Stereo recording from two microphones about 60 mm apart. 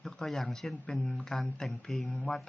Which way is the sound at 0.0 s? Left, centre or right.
Centre.